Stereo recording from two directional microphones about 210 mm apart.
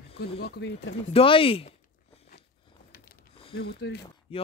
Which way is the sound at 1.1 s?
25° left (ahead or behind).